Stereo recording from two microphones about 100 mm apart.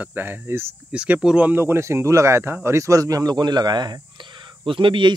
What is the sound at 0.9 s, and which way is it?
Speech, 10° right (ahead or behind).